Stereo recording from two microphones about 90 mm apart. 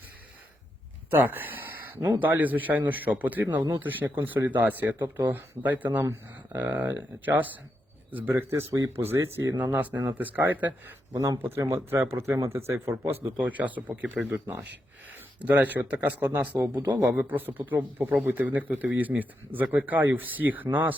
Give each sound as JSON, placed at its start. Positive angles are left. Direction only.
{"t": 1.1, "sound": "a sound", "side_deg": -20}
{"t": 2.2, "sound": "speech", "side_deg": -20}
{"t": 6.0, "sound": "speech", "side_deg": -30}
{"t": 6.6, "sound": "speech", "side_deg": -20}
{"t": 11.1, "sound": "speech", "side_deg": -35}
{"t": 13.3, "sound": "speech", "side_deg": -15}